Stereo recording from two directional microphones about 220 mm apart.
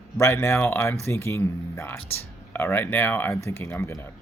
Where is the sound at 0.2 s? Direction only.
10° left (ahead or behind).